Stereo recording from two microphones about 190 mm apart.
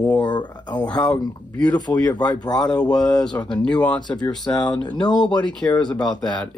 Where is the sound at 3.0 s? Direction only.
20° left (ahead or behind).